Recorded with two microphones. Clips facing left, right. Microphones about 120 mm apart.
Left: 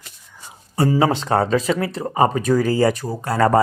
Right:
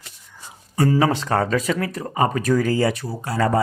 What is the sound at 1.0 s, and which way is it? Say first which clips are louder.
Speech: left 2 dB; 25° left (ahead or behind).